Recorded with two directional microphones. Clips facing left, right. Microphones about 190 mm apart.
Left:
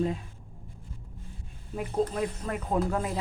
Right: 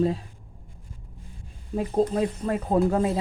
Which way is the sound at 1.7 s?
35° right (ahead or behind).